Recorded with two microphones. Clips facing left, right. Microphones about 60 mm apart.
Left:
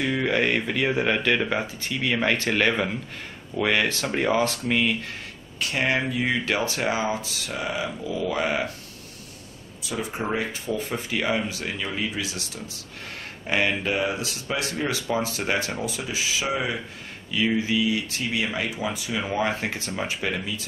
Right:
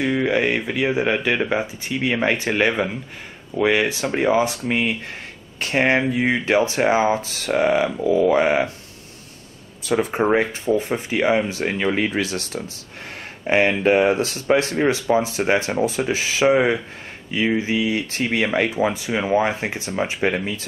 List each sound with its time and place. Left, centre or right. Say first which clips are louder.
0.0 s speech: right 4 dB; centre
5.6 s speech: right 6 dB; right
8.4 s speech: right 7 dB; right
9.8 s speech: right 10 dB; right
13.5 s speech: right 8 dB; right
17.3 s speech: right 3 dB; right
20.2 s speech: right 7 dB; right